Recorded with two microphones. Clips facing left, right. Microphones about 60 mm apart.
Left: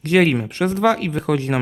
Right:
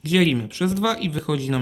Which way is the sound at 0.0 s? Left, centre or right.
Left.